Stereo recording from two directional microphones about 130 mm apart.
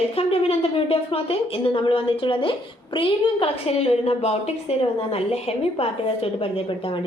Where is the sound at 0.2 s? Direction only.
50° left (ahead or behind).